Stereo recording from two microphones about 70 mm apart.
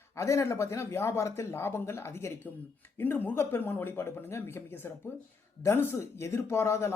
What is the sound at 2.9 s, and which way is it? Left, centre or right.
Speech, left.